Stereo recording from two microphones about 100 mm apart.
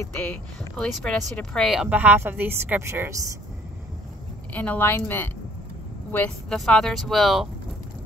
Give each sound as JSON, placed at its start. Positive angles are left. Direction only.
{"t": 0.7, "sound": "speech", "side_deg": 5}
{"t": 1.8, "sound": "speech", "side_deg": -15}
{"t": 4.6, "sound": "speech", "side_deg": 20}
{"t": 6.5, "sound": "speech", "side_deg": 5}